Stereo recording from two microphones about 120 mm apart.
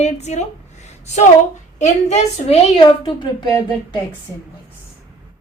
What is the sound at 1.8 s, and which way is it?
Speech, 65° left (ahead or behind).